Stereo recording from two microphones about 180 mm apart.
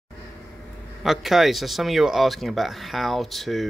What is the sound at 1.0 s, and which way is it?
Speech, centre (ahead or behind).